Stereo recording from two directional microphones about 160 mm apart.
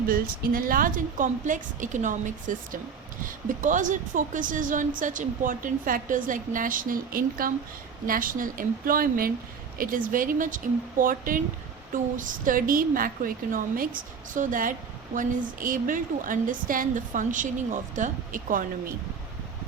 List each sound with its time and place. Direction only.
0.1 s a woman's voice: 65° right (ahead or behind)